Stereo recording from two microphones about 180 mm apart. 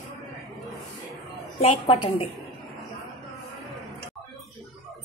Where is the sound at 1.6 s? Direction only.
30° left (ahead or behind).